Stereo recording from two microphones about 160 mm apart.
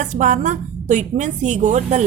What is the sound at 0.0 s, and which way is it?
A woman's voice, 50° right (ahead or behind).